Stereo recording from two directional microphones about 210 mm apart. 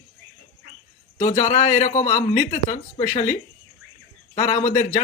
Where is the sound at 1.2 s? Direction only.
35° left (ahead or behind).